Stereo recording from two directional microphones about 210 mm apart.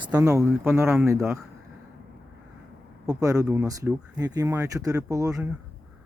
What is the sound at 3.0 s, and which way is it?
Speech, 15° right (ahead or behind).